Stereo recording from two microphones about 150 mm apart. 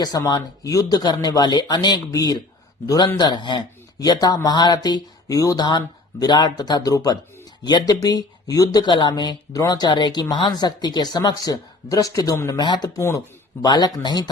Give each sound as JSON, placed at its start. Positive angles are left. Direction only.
{"t": 0.0, "sound": "speech", "side_deg": 25}